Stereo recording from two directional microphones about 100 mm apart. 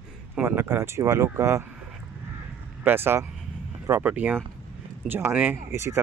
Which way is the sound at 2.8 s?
20° right (ahead or behind).